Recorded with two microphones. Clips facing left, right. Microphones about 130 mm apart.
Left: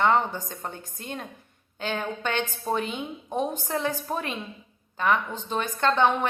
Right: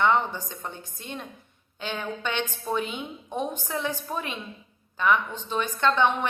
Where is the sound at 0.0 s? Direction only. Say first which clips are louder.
Left 1 dB; 40° left (ahead or behind).